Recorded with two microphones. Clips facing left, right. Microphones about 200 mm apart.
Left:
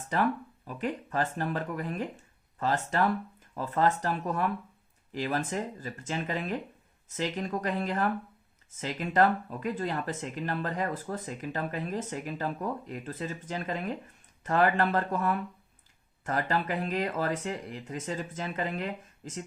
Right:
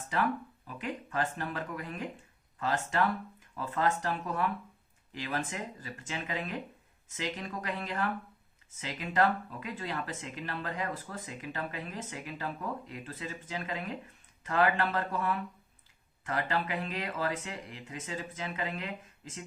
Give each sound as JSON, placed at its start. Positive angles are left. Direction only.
{"t": 0.8, "sound": "speech", "side_deg": 40}